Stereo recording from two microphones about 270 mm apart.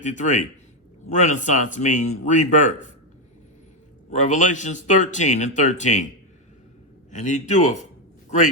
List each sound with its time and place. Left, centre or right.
0.0 s speech: left
4.1 s speech: left
7.1 s speech: left